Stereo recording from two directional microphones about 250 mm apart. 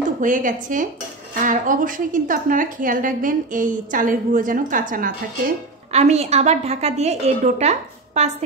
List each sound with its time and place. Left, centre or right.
0.2 s a woman's voice: right